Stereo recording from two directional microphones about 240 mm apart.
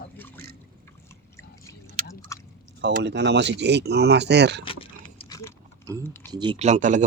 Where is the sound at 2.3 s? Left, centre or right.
Centre.